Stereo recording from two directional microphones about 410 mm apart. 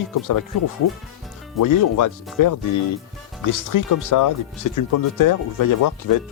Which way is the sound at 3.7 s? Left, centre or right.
Left.